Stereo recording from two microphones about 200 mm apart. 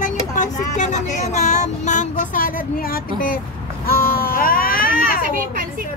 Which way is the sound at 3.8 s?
50° left (ahead or behind).